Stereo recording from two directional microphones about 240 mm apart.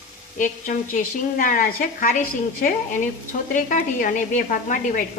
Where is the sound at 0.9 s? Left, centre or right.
Left.